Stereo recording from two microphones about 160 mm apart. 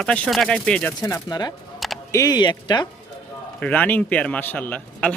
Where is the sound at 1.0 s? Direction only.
20° left (ahead or behind).